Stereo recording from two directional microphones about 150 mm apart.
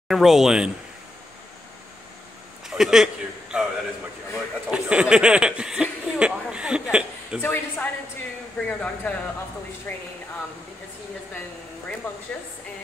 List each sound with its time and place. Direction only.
0.1 s speech: centre (ahead or behind)
2.7 s a man's voice: centre (ahead or behind)
3.5 s a sound: 5° right (ahead or behind)
4.6 s speech: 5° right (ahead or behind)
7.4 s speech: 15° left (ahead or behind)